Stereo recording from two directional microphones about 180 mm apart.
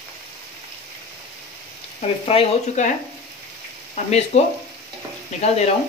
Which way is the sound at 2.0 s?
35° left (ahead or behind).